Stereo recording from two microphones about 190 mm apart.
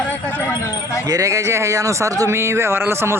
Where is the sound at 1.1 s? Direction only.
15° right (ahead or behind).